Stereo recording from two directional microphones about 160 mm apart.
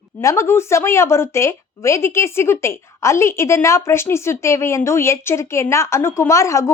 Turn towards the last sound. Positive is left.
turn(degrees=20)  # may be behind; listen again after turning